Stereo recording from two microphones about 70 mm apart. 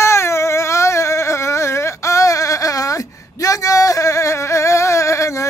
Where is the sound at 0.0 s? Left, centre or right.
Left.